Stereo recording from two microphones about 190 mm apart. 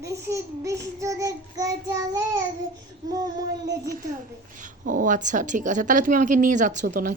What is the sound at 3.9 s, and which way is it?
Speech, 45° right (ahead or behind).